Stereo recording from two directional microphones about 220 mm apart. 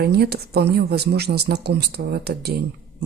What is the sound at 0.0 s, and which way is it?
Speech, 45° right (ahead or behind).